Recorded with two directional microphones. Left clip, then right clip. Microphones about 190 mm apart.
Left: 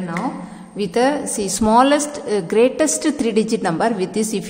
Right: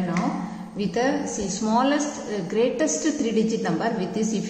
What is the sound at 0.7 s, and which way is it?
A woman's voice, 40° left (ahead or behind).